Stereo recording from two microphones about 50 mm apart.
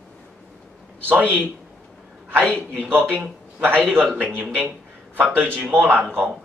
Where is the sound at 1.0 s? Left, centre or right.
Right.